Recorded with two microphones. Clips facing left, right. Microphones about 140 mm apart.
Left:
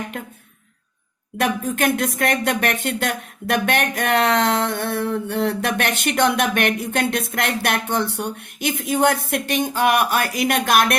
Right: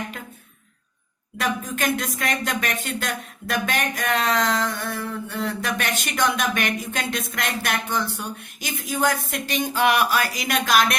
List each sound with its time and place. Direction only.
1.4 s music: 65° left (ahead or behind)